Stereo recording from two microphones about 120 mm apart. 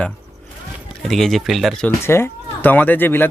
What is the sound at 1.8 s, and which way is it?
Speech, 20° left (ahead or behind).